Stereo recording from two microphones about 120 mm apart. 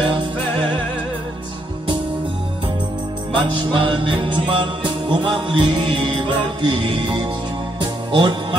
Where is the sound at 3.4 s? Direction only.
45° right (ahead or behind).